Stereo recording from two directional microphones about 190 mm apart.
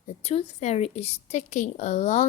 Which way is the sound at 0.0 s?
35° left (ahead or behind).